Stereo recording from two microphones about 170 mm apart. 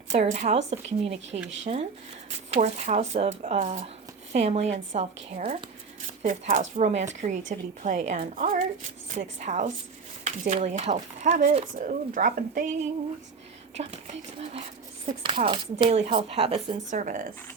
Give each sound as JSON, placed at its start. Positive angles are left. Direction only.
{"t": 0.1, "sound": "speech", "side_deg": -40}
{"t": 1.3, "sound": "speech", "side_deg": -90}
{"t": 1.6, "sound": "a woman's voice", "side_deg": -35}
{"t": 13.7, "sound": "speech", "side_deg": -40}